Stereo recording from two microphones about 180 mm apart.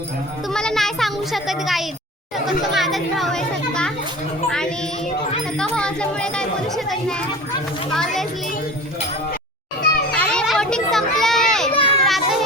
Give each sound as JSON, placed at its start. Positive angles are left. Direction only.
{"t": 0.4, "sound": "a sound", "side_deg": 5}
{"t": 2.5, "sound": "speech", "side_deg": 0}
{"t": 10.1, "sound": "children playing", "side_deg": 5}
{"t": 11.7, "sound": "children playing", "side_deg": 30}
{"t": 12.0, "sound": "children playing", "side_deg": 0}